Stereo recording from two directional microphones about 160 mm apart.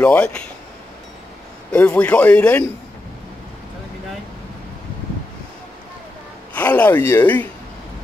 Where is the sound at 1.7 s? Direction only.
10° left (ahead or behind).